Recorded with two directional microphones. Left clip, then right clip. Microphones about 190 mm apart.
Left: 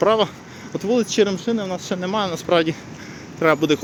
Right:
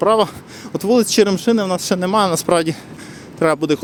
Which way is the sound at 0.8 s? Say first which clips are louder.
Right 4 dB; 30° right (ahead or behind).